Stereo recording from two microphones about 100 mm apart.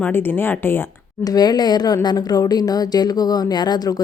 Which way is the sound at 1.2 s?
40° left (ahead or behind).